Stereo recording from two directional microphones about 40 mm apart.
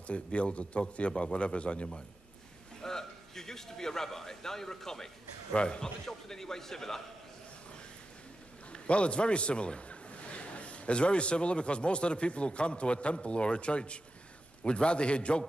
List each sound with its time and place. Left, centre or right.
0.0 s a man's voice: left
2.8 s a man's voice: centre
5.5 s a man's voice: left
6.0 s a man's voice: centre
8.8 s a man's voice: left